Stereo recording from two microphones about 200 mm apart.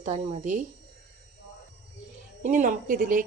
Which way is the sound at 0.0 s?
35° right (ahead or behind).